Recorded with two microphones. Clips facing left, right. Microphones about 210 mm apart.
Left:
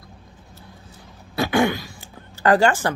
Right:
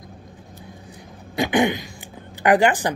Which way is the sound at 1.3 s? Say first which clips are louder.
Even; 20° right (ahead or behind).